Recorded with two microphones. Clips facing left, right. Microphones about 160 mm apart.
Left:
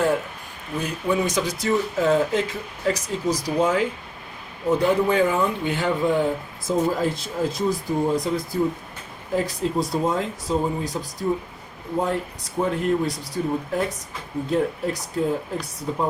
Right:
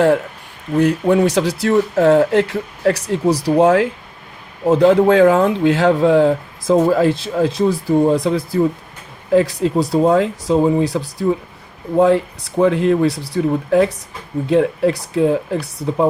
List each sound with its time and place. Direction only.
0.8 s speech: 70° right (ahead or behind)
4.6 s speech: 90° right; by 8.6 s 75° right (ahead or behind)
9.3 s speech: 85° right